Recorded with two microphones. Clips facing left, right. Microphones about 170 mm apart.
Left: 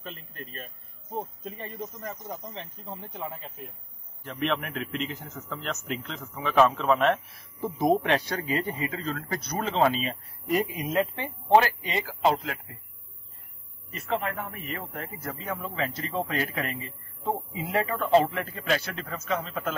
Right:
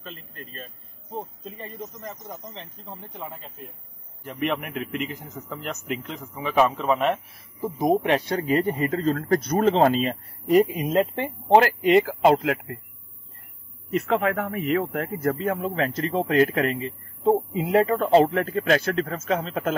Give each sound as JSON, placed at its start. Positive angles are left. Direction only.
{"t": 1.1, "sound": "speech", "side_deg": 5}
{"t": 2.0, "sound": "speech", "side_deg": -20}
{"t": 2.5, "sound": "speech", "side_deg": 5}
{"t": 4.2, "sound": "a man's voice", "side_deg": -10}
{"t": 8.3, "sound": "speech", "side_deg": -35}
{"t": 8.7, "sound": "speech", "side_deg": -45}
{"t": 11.8, "sound": "speech", "side_deg": -60}
{"t": 13.8, "sound": "a man's voice", "side_deg": -70}